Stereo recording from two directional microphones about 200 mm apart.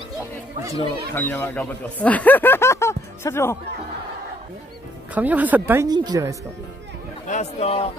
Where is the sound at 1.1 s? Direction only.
10° left (ahead or behind).